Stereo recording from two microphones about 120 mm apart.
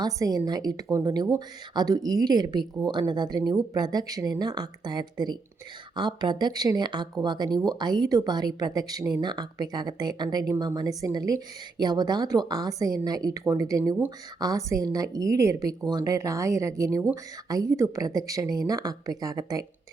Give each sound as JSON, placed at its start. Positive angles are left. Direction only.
{"t": 0.0, "sound": "a woman's voice", "side_deg": -35}